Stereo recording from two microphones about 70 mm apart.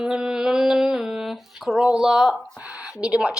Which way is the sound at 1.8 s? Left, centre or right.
Centre.